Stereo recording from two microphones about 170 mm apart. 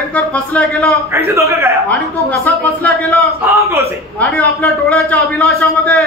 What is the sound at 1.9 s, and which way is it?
A man's voice, 5° left (ahead or behind).